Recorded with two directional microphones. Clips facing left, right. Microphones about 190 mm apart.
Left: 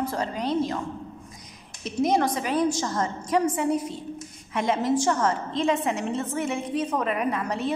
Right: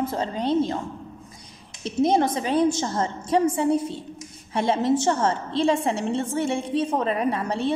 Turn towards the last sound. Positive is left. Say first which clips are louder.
# right 2 dB
turn(degrees=-30)  # may be behind; listen again after turning